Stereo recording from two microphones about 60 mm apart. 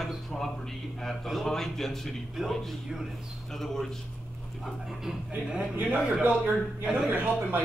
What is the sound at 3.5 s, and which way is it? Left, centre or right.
Speech, centre.